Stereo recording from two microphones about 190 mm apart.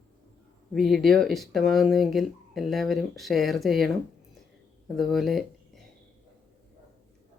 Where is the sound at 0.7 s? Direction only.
Centre (ahead or behind).